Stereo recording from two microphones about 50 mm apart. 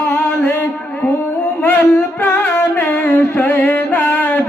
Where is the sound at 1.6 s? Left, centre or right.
Left.